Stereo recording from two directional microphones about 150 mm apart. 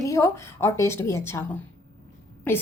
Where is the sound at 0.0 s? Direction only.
20° left (ahead or behind).